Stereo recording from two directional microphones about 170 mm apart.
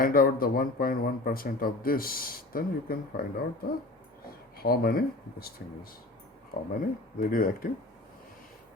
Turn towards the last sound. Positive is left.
turn(degrees=55)  # may be behind; listen again after turning